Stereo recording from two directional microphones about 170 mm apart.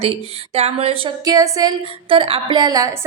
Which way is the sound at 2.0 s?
30° right (ahead or behind).